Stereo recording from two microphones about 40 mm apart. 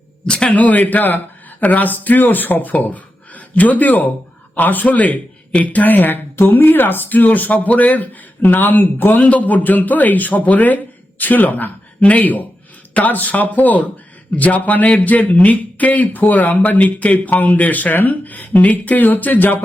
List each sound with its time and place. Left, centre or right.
0.3 s a sound: left
0.5 s speech: left
8.4 s speech: left
9.2 s a man's voice: left